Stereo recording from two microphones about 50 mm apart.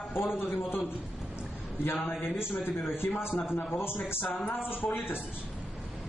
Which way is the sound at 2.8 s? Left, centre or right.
Left.